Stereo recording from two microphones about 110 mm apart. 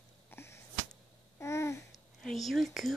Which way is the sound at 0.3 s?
20° left (ahead or behind).